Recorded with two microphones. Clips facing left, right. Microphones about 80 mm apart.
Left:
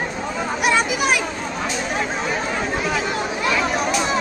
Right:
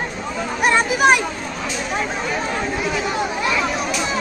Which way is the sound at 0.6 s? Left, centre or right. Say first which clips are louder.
Right 5 dB; right.